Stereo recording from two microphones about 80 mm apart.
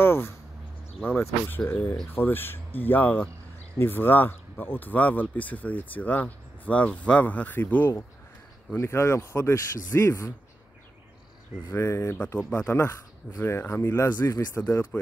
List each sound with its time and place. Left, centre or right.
0.0 s a sound: left
1.7 s speech: left
8.7 s speech: left
11.7 s speech: left
12.4 s speech: centre; by 14.6 s left